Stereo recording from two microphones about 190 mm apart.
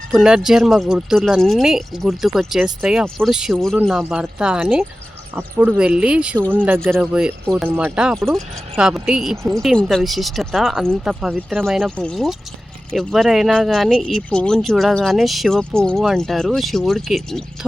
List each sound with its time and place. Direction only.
0.1 s speech: 5° right (ahead or behind)